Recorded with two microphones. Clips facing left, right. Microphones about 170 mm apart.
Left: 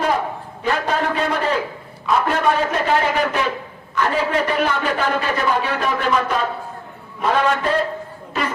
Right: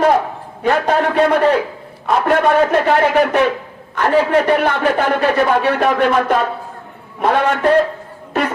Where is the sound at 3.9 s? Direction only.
60° right (ahead or behind).